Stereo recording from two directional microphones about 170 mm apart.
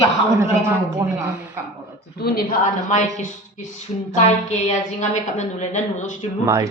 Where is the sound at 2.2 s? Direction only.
65° left (ahead or behind).